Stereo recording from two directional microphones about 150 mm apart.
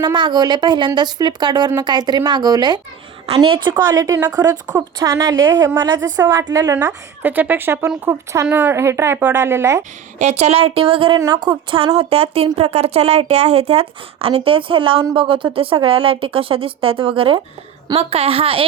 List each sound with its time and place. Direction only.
0.0 s a woman's voice: 30° right (ahead or behind)
10.2 s a woman's voice: 50° right (ahead or behind); by 11.9 s 30° right (ahead or behind)
11.9 s a woman's voice: 40° right (ahead or behind)